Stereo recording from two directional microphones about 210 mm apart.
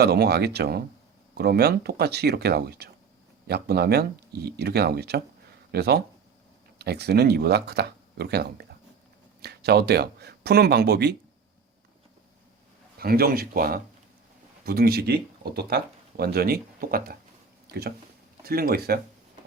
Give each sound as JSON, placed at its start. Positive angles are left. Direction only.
{"t": 0.0, "sound": "speech", "side_deg": -50}
{"t": 13.0, "sound": "speech", "side_deg": -45}
{"t": 18.4, "sound": "speech", "side_deg": -45}